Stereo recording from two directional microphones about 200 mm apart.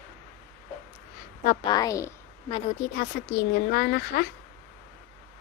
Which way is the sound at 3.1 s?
55° left (ahead or behind).